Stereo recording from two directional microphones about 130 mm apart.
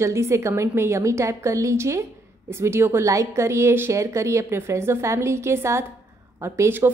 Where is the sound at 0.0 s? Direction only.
20° right (ahead or behind).